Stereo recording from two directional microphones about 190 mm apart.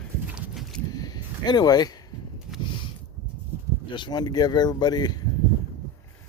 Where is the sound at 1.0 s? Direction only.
20° left (ahead or behind).